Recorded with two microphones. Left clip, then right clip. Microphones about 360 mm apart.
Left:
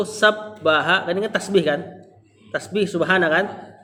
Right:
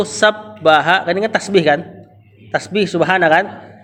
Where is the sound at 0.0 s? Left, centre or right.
Right.